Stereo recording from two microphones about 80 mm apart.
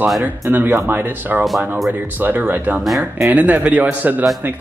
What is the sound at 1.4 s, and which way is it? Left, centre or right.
Speech, centre.